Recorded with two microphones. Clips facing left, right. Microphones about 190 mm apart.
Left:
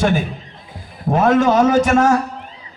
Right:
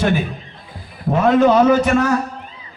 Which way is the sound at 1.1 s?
45° left (ahead or behind).